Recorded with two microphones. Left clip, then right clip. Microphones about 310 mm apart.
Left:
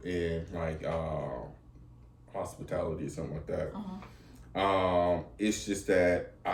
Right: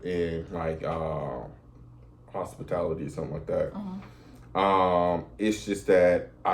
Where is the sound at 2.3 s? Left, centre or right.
Centre.